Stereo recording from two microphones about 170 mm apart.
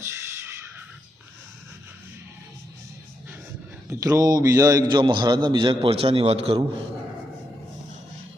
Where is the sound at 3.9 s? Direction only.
20° right (ahead or behind); by 6.5 s 35° right (ahead or behind).